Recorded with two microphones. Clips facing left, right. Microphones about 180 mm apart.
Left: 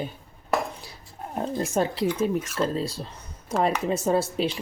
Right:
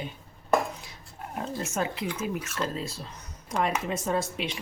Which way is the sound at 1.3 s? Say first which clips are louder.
Left 6 dB; 35° left (ahead or behind).